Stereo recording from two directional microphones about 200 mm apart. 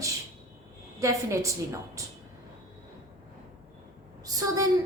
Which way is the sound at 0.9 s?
15° right (ahead or behind).